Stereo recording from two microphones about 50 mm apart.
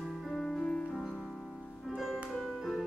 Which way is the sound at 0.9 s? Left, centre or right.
Centre.